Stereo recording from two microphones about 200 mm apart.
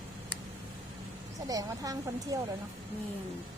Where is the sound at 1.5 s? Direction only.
15° right (ahead or behind).